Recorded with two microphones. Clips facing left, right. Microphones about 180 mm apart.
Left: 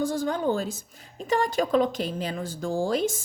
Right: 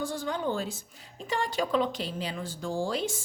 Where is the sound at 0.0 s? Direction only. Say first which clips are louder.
Left 6 dB; 45° left (ahead or behind).